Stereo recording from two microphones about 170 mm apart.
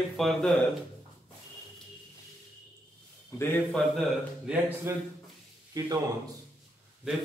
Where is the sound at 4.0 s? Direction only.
10° right (ahead or behind).